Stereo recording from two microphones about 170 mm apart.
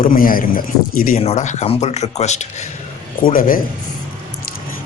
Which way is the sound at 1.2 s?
40° left (ahead or behind).